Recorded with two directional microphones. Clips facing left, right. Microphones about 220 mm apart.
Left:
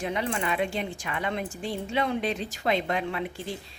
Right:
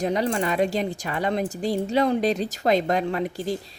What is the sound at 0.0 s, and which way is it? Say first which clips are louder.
Speech: right 6 dB; 40° right (ahead or behind).